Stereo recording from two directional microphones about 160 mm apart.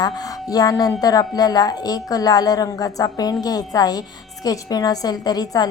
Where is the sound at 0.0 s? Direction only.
25° left (ahead or behind).